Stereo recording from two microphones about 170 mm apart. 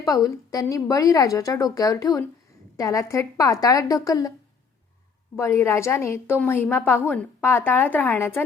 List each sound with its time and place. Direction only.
0.0 s a woman's voice: 20° left (ahead or behind)
5.4 s a woman's voice: 15° left (ahead or behind)